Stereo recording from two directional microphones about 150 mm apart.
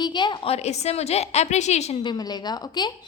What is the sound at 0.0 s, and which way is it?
A woman's voice, 30° left (ahead or behind).